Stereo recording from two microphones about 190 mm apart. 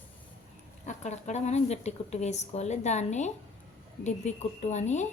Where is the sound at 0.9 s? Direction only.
40° left (ahead or behind).